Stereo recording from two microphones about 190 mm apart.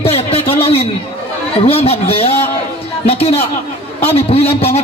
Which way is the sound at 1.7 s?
30° left (ahead or behind).